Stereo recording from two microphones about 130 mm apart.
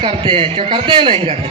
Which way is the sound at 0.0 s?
40° right (ahead or behind).